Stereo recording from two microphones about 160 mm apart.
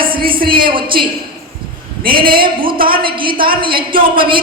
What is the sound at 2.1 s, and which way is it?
Speech, 65° right (ahead or behind).